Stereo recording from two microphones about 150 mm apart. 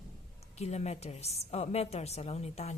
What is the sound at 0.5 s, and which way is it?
A woman's voice, 45° left (ahead or behind).